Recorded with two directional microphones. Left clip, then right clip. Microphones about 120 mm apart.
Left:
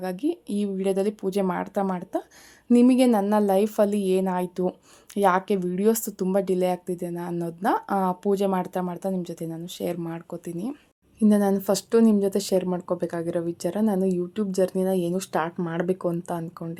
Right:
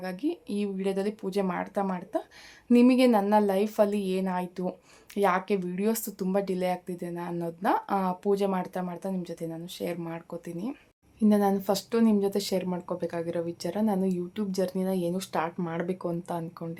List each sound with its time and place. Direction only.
0.0 s a woman's voice: 40° left (ahead or behind)